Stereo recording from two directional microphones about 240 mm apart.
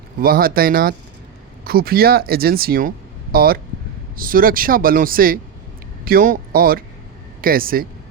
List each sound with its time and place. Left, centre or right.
0.2 s speech: right